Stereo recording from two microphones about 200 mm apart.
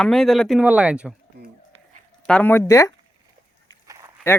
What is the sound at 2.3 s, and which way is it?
Speech, 5° left (ahead or behind).